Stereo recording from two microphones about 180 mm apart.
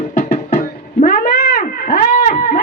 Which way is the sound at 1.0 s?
50° left (ahead or behind).